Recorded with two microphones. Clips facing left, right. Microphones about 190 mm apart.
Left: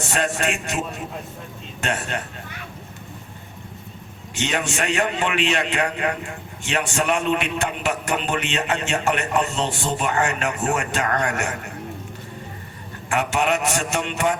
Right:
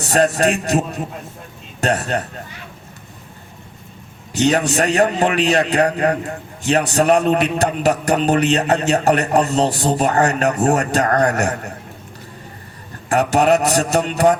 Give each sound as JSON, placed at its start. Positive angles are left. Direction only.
{"t": 0.1, "sound": "a man's voice", "side_deg": -40}
{"t": 4.4, "sound": "a man's voice", "side_deg": -40}
{"t": 13.1, "sound": "a man's voice", "side_deg": -40}